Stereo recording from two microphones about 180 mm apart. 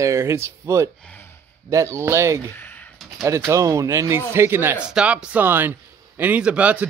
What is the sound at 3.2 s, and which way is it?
A man's voice, 15° right (ahead or behind).